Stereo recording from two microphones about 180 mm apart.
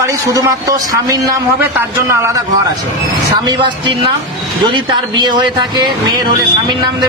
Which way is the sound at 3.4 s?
25° right (ahead or behind).